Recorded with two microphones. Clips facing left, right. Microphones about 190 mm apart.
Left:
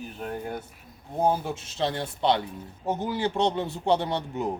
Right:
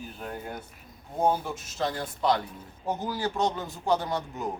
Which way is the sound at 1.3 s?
30° left (ahead or behind).